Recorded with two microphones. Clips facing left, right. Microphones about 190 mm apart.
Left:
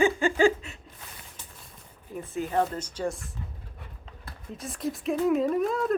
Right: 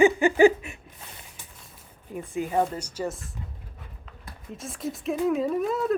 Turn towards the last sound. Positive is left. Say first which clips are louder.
# even
turn(degrees=0)  # may be behind; listen again after turning